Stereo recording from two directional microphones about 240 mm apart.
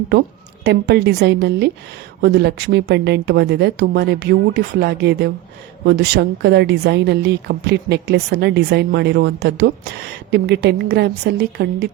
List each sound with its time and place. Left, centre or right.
0.6 s a woman's voice: right